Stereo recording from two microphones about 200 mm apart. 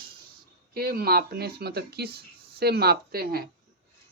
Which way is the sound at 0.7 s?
50° right (ahead or behind).